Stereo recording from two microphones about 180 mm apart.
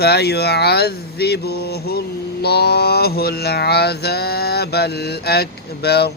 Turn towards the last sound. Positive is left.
turn(degrees=65)  # may be behind; listen again after turning